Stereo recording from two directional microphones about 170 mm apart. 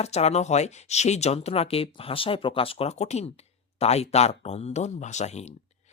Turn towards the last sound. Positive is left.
turn(degrees=40)  # may be behind; listen again after turning